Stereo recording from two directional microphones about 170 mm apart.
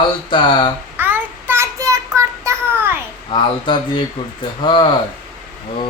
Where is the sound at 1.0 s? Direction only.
10° right (ahead or behind).